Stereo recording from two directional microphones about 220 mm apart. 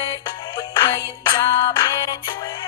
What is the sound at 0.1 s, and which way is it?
Music, 20° left (ahead or behind).